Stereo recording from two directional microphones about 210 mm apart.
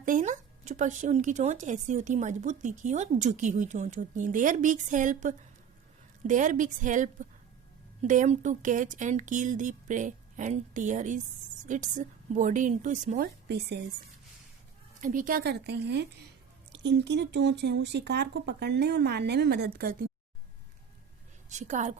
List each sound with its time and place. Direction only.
0.0 s speech: 40° right (ahead or behind); by 13.8 s 55° right (ahead or behind)
15.0 s speech: 40° right (ahead or behind)
21.5 s a woman's voice: 35° right (ahead or behind)